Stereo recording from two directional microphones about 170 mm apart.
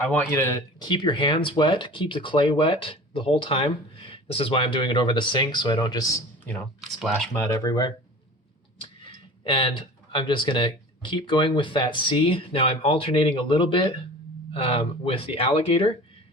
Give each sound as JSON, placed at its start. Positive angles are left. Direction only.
{"t": 0.1, "sound": "speech", "side_deg": 10}
{"t": 9.4, "sound": "speech", "side_deg": 30}